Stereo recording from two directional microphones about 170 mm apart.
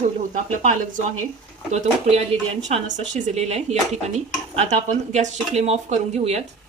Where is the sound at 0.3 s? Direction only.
45° right (ahead or behind).